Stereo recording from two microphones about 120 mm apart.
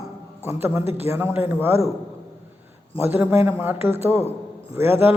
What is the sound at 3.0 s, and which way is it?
A man's voice, 20° right (ahead or behind).